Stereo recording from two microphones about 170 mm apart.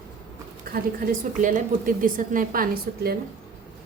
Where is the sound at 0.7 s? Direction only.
55° right (ahead or behind).